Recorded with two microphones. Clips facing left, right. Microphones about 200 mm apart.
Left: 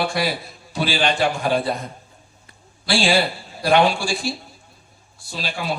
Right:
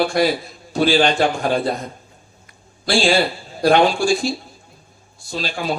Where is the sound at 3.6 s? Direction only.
45° right (ahead or behind).